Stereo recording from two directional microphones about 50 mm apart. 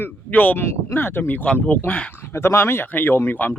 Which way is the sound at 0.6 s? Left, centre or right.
Left.